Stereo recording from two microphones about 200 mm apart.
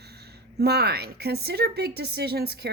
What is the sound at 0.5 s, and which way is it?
Speech, 55° right (ahead or behind).